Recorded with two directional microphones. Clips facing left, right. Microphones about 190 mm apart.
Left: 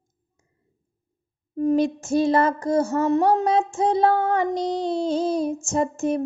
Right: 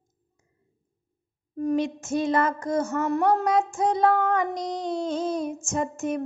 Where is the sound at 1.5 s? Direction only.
30° left (ahead or behind).